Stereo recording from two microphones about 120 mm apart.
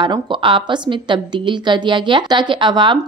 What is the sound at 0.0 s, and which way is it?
A woman's voice, 40° right (ahead or behind).